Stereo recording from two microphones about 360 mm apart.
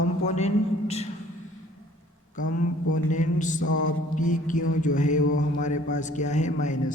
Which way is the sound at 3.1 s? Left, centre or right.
Left.